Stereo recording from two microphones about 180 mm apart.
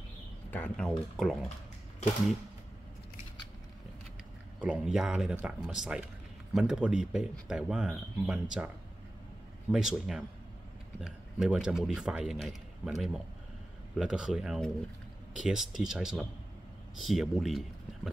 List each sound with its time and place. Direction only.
0.5 s speech: 10° left (ahead or behind)
4.6 s speech: 5° right (ahead or behind)